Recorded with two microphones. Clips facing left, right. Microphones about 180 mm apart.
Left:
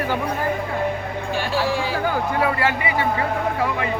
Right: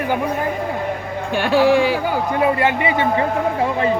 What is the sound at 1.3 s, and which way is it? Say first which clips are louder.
Speech: right 9 dB; 60° right (ahead or behind).